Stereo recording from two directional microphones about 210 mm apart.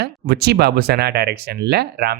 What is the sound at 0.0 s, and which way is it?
Speech, 50° right (ahead or behind).